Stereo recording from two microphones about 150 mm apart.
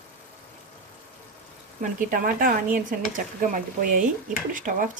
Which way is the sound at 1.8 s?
65° right (ahead or behind).